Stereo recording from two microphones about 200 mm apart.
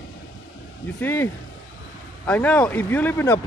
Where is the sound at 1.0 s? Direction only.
10° left (ahead or behind).